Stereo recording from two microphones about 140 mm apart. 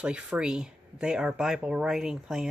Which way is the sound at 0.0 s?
10° right (ahead or behind).